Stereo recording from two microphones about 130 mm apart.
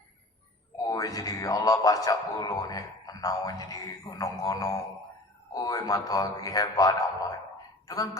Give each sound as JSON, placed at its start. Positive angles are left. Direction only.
{"t": 0.9, "sound": "a man's voice", "side_deg": 30}